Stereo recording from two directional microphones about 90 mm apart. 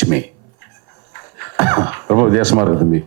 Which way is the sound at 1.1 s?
20° right (ahead or behind).